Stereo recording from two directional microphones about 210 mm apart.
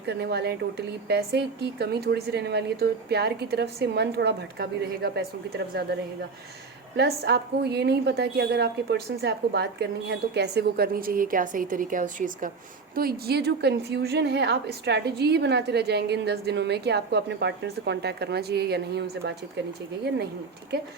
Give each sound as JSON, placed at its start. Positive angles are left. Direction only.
{"t": 0.0, "sound": "a woman's voice", "side_deg": -55}
{"t": 6.9, "sound": "a woman's voice", "side_deg": -50}